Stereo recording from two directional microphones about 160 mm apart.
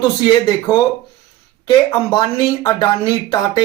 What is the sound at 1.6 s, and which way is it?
Speech, 25° left (ahead or behind).